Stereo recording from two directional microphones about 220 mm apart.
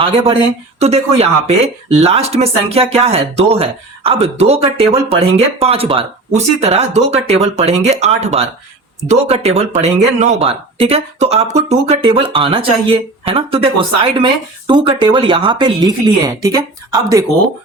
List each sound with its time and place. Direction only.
0.8 s speech: 30° right (ahead or behind)
14.7 s speech: 20° right (ahead or behind)